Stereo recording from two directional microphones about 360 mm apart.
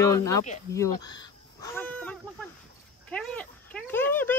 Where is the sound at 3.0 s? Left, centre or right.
Centre.